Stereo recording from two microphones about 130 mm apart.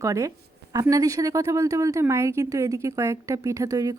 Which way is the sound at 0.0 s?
25° right (ahead or behind).